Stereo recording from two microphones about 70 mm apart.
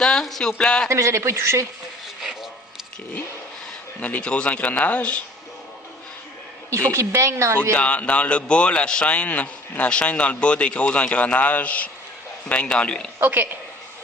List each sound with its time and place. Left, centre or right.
0.0 s a man's voice: centre
0.9 s speech: right
4.0 s a man's voice: centre
7.2 s speech: right
7.7 s a man's voice: centre
13.1 s a woman's voice: right